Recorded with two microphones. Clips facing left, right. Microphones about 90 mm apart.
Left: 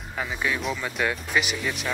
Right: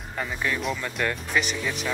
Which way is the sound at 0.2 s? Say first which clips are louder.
Even; 5° left (ahead or behind).